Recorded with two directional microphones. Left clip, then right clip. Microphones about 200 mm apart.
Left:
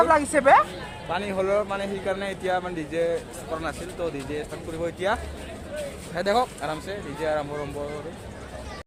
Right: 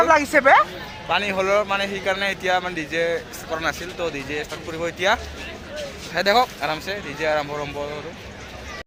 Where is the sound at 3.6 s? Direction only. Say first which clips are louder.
Right 7 dB; 5° right (ahead or behind).